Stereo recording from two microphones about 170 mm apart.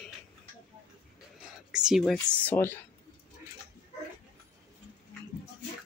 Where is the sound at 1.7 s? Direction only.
5° right (ahead or behind).